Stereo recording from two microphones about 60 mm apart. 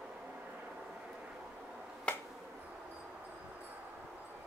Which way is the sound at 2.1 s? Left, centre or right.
Centre.